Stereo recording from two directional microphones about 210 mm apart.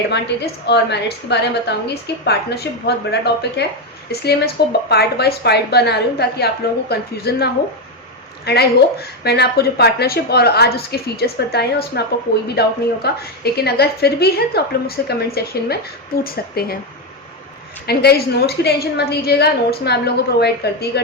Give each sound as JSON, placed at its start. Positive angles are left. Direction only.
{"t": 0.1, "sound": "a woman's voice", "side_deg": 55}
{"t": 17.8, "sound": "a woman's voice", "side_deg": 50}